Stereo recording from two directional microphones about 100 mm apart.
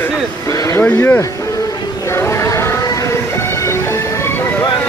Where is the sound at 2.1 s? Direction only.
25° left (ahead or behind).